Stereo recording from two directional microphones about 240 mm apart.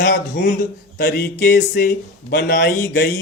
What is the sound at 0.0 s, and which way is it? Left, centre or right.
Speech, left.